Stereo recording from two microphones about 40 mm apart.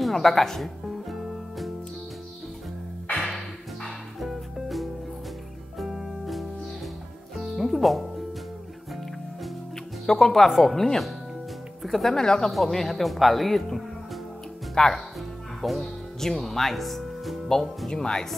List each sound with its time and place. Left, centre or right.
0.0 s speech: centre
0.8 s music: centre
3.2 s music: centre
10.2 s speech: centre
12.2 s speech: centre
12.4 s speech: centre
14.8 s speech: centre
15.6 s speech: centre
17.8 s speech: centre